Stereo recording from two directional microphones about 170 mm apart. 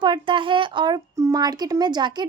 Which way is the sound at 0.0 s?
30° right (ahead or behind).